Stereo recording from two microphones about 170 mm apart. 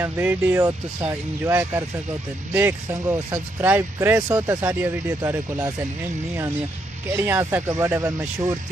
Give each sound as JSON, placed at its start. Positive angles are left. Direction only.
{"t": 0.0, "sound": "speech", "side_deg": -10}
{"t": 7.2, "sound": "speech", "side_deg": -15}